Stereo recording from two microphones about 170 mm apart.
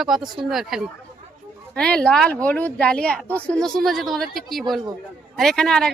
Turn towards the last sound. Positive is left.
turn(degrees=5)  # may be behind; listen again after turning